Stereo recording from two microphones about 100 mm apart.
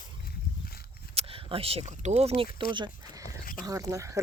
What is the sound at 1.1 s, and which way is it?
Speech, 75° right (ahead or behind).